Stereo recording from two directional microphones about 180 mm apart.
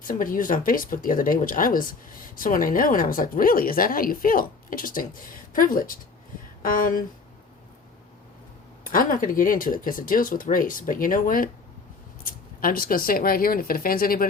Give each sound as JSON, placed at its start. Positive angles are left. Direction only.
{"t": 0.0, "sound": "speech", "side_deg": 50}
{"t": 8.8, "sound": "speech", "side_deg": 50}